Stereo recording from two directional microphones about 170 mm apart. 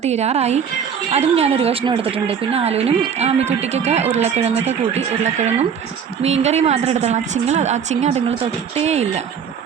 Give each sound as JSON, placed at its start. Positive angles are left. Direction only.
{"t": 0.0, "sound": "a woman's voice", "side_deg": -40}